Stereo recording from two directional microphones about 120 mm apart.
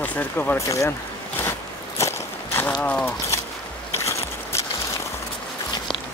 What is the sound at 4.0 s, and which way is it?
Biting, 25° left (ahead or behind).